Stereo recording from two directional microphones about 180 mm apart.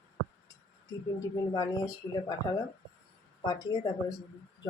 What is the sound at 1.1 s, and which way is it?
Speech, 20° left (ahead or behind).